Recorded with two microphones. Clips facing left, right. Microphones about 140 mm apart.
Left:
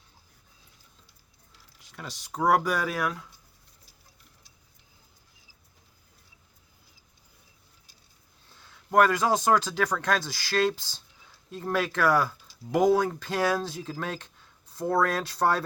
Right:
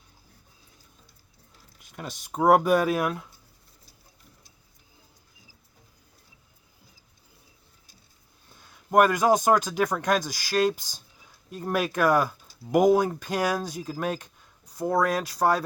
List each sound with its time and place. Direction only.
1.9 s speech: 20° right (ahead or behind)
8.5 s speech: 15° right (ahead or behind)